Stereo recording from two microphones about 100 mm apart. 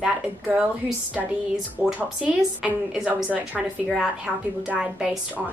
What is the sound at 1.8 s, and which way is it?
Speech, 15° right (ahead or behind).